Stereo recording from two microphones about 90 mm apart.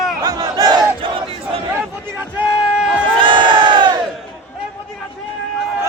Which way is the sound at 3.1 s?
60° right (ahead or behind).